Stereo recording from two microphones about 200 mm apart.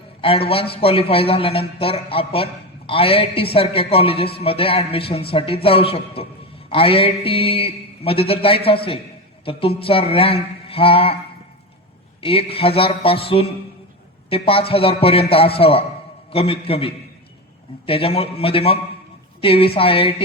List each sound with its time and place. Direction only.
0.2 s a man's voice: 25° left (ahead or behind)
12.2 s a man's voice: 25° left (ahead or behind)